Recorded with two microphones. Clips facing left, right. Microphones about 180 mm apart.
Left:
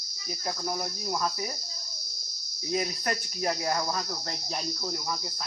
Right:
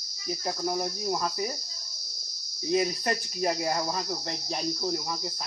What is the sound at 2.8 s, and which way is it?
Cricket, 20° right (ahead or behind).